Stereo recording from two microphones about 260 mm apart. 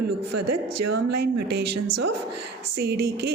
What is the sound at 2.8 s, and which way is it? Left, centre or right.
Speech, right.